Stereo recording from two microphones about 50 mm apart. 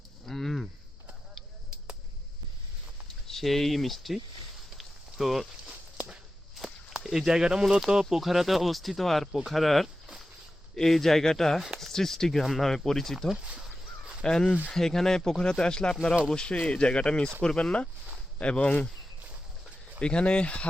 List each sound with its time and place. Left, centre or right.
0.3 s a sound: centre
3.2 s speech: centre
4.8 s a sound: centre
6.6 s speech: centre
14.3 s speech: centre
20.0 s speech: centre